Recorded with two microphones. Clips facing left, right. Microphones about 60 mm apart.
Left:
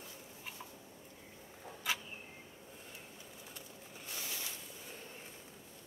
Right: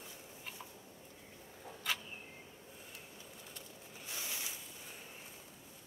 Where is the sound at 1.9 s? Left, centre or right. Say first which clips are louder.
Left 1 dB; centre.